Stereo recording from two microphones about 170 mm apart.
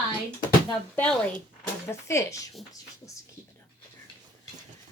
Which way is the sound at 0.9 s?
5° left (ahead or behind).